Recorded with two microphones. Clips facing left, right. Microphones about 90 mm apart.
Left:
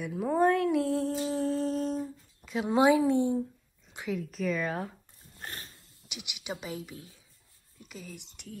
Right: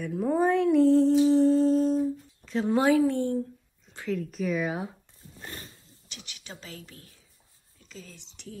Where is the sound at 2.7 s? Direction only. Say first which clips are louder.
Even; 20° left (ahead or behind).